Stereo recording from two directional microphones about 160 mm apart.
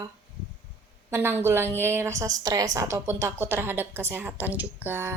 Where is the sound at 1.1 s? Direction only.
15° right (ahead or behind).